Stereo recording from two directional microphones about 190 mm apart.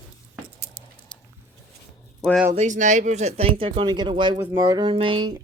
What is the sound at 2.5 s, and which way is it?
Speech, 40° right (ahead or behind).